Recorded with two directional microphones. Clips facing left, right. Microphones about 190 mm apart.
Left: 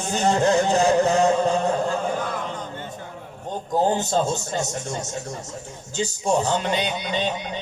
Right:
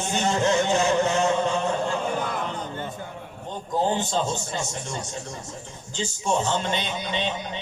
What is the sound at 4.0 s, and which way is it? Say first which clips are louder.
A man's voice: left 3 dB; 40° left (ahead or behind).